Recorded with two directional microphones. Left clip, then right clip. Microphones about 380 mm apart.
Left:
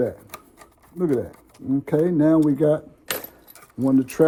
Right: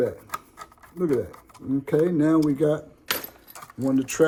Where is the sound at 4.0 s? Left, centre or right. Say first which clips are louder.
Left 3 dB; centre.